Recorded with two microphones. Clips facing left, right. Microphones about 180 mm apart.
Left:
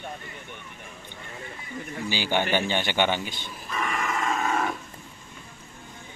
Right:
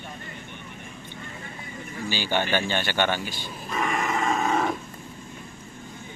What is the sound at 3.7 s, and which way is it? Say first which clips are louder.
Grunt: right 3 dB; 30° right (ahead or behind).